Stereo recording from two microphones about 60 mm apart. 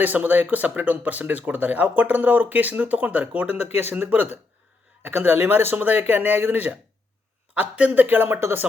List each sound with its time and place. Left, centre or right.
0.0 s speech: right
8.0 s speech: right